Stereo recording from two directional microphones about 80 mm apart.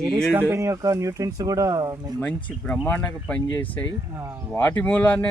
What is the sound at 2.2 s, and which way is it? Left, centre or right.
Speech, centre.